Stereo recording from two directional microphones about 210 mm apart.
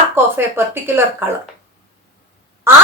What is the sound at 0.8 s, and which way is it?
Speech, 10° right (ahead or behind).